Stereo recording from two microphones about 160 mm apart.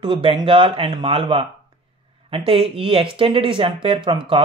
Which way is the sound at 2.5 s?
35° right (ahead or behind).